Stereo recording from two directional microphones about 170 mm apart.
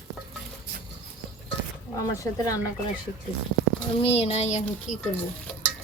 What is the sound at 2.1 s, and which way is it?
Speech, 20° left (ahead or behind).